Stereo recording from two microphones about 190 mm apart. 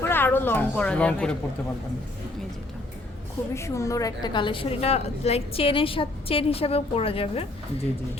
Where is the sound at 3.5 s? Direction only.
15° left (ahead or behind).